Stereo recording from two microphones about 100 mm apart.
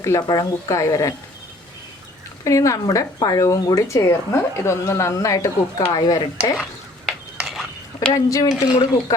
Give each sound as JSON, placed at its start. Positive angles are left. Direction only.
{"t": 0.0, "sound": "speech", "side_deg": 30}
{"t": 2.4, "sound": "speech", "side_deg": 30}
{"t": 7.4, "sound": "dishes", "side_deg": 0}
{"t": 8.1, "sound": "speech", "side_deg": 35}